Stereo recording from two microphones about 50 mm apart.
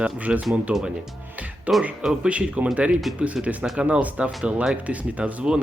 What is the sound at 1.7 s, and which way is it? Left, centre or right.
Speech, right.